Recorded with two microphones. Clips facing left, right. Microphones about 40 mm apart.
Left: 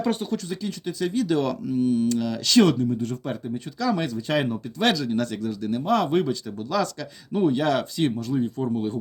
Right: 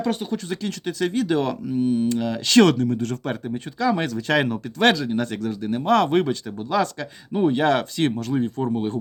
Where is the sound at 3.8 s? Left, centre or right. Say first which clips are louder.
Right 3 dB; right.